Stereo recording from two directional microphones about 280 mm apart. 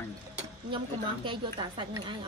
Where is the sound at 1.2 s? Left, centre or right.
Centre.